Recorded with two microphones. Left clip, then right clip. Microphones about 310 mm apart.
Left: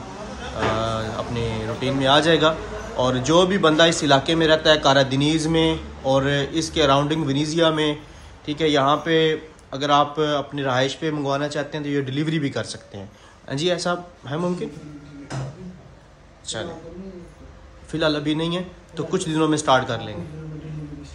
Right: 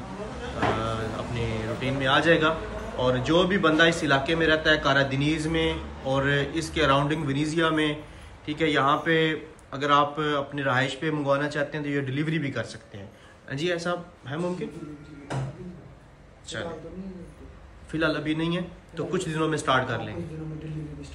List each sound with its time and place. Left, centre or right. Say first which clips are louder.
0.7 s music: left 5 dB; centre
3.0 s a man's voice: left 5 dB; centre
16.5 s a man's voice: left 5 dB; centre
17.9 s a man's voice: left 4 dB; centre